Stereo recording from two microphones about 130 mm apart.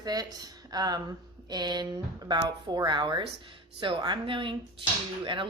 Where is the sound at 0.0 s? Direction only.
30° right (ahead or behind).